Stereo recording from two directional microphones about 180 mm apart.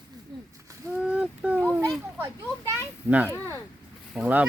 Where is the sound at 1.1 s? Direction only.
5° right (ahead or behind).